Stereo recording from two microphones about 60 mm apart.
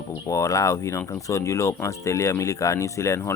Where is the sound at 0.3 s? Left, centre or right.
Left.